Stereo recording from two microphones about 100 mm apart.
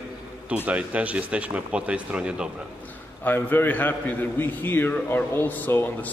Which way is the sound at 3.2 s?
20° left (ahead or behind).